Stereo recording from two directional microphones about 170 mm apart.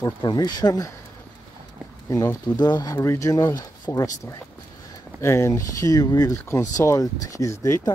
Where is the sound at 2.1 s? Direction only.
20° left (ahead or behind).